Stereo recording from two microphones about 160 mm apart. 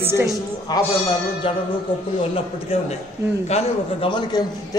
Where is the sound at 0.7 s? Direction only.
25° left (ahead or behind).